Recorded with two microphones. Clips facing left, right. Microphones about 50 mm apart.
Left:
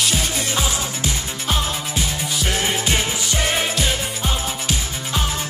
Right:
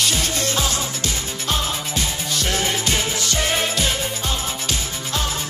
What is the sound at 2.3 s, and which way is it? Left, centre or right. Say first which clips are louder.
Music: even; centre.